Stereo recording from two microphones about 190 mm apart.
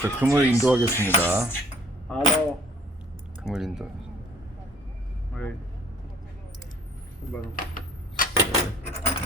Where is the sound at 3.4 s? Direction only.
Centre (ahead or behind).